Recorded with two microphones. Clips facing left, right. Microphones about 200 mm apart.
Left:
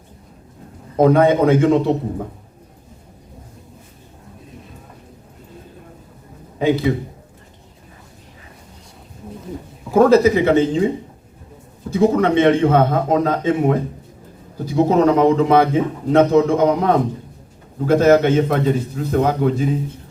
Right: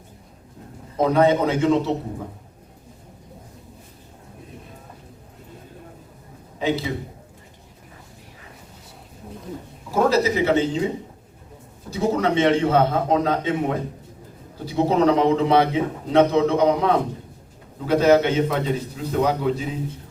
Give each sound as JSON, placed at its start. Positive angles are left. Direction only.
{"t": 0.9, "sound": "a man's voice", "side_deg": 55}
{"t": 6.6, "sound": "a man's voice", "side_deg": 55}
{"t": 9.9, "sound": "a man's voice", "side_deg": 55}
{"t": 11.9, "sound": "a man's voice", "side_deg": 55}